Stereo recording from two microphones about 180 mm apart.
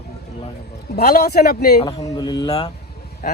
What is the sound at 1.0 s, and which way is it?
Speech, 60° left (ahead or behind).